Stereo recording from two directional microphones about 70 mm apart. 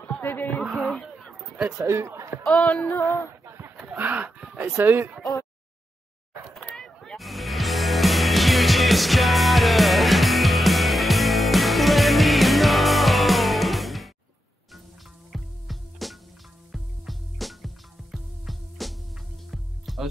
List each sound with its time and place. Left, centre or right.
0.2 s music: left
1.0 s a sound: centre
1.9 s speech: right
2.6 s music: centre
3.4 s chicken: right
3.8 s a sound: right
4.6 s speech: right
6.7 s music: centre
15.3 s music: centre